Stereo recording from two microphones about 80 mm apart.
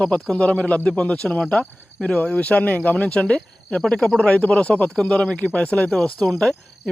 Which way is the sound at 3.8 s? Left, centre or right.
Centre.